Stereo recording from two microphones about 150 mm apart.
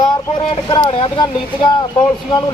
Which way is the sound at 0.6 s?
30° left (ahead or behind).